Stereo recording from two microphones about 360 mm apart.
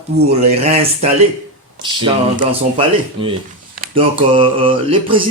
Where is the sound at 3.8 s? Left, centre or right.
Centre.